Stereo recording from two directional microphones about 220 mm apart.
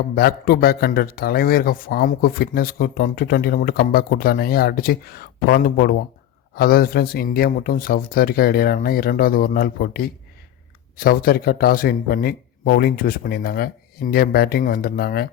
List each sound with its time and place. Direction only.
0.2 s speech: 45° left (ahead or behind)